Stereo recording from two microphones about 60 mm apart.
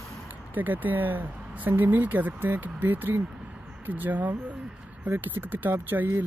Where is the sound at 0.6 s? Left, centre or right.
Right.